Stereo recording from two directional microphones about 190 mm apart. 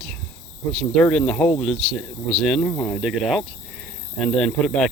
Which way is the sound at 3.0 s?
Centre (ahead or behind).